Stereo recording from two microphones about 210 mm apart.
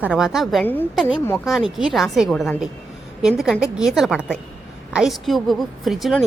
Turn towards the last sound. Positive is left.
turn(degrees=0)  # may be behind; listen again after turning